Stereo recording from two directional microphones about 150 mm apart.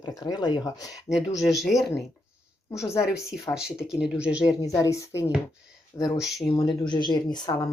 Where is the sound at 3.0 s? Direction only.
5° right (ahead or behind).